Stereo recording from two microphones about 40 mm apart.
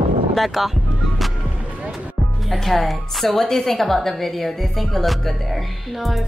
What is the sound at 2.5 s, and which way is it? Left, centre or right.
Speech, centre.